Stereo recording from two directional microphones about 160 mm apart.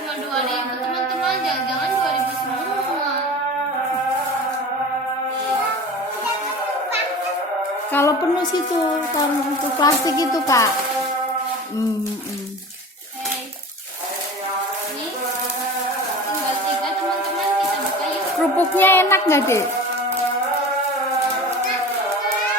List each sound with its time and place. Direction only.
7.9 s speech: 20° left (ahead or behind)
9.7 s speech: 25° left (ahead or behind)
18.5 s music: 10° left (ahead or behind)